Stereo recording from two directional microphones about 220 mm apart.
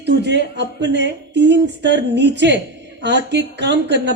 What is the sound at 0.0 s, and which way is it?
Speech, 50° right (ahead or behind).